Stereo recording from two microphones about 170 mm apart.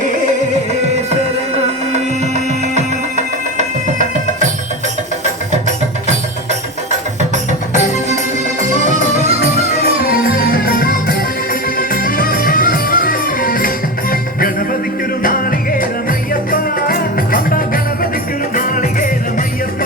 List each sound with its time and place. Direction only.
1.1 s music: 40° right (ahead or behind)
10.1 s music: 60° left (ahead or behind)